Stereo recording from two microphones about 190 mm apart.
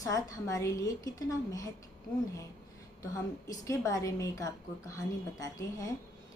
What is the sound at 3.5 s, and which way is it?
A woman's voice, 20° left (ahead or behind).